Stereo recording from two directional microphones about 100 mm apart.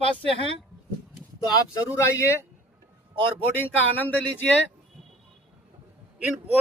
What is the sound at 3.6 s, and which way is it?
Speech, 20° left (ahead or behind).